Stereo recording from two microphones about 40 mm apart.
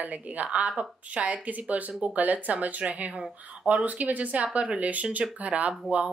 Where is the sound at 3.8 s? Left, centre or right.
Right.